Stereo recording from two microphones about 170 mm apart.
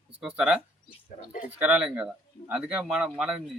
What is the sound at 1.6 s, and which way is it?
Speech, 5° right (ahead or behind).